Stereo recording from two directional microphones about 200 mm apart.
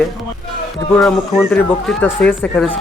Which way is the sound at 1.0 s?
5° left (ahead or behind).